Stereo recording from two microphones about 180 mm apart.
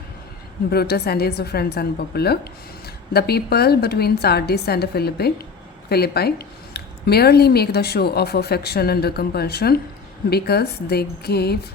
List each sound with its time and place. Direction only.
0.7 s a woman's voice: 60° left (ahead or behind)